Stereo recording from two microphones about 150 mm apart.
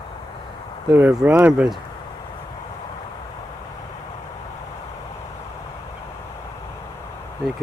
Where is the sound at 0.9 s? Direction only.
5° right (ahead or behind).